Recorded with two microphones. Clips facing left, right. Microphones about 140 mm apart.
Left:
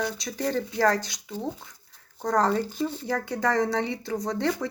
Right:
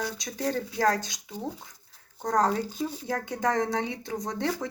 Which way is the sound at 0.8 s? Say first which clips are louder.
Even; 15° right (ahead or behind).